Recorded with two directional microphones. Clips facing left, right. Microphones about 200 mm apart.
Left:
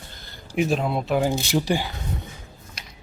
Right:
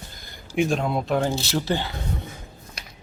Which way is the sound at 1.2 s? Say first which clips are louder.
Left 2 dB; 15° left (ahead or behind).